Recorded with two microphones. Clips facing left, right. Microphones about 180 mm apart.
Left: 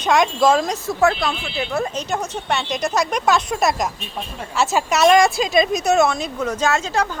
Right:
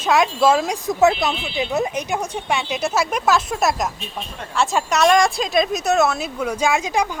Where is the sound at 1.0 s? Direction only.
20° right (ahead or behind).